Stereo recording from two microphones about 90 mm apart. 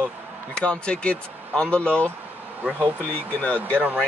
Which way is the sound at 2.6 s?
15° right (ahead or behind).